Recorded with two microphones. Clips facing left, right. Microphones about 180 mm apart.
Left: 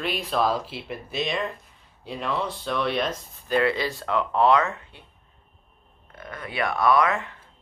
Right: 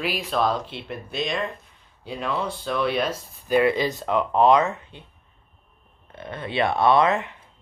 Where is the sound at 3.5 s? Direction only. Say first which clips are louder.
Right 3 dB; 15° right (ahead or behind).